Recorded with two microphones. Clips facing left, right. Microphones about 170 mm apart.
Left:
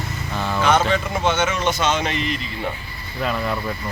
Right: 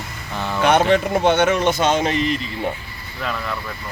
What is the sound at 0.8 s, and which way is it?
A man's voice, 60° right (ahead or behind).